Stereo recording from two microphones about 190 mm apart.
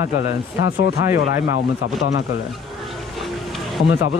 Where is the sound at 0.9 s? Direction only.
15° right (ahead or behind).